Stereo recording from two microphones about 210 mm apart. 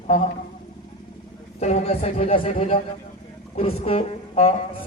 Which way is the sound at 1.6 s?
30° left (ahead or behind).